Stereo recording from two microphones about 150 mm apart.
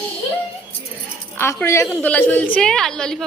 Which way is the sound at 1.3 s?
15° left (ahead or behind).